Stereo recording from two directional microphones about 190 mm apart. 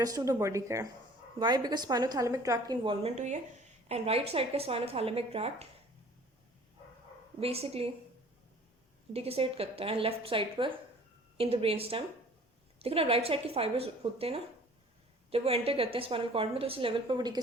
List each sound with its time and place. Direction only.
0.0 s a woman's voice: 20° right (ahead or behind)
7.3 s a woman's voice: 30° right (ahead or behind)
9.1 s a woman's voice: 30° right (ahead or behind)